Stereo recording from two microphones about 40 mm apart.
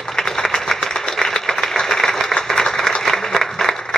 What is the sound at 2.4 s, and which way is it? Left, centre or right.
Applause, centre.